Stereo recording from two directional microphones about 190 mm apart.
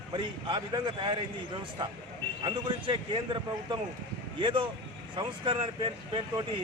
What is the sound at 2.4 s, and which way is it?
A man's voice, 25° right (ahead or behind).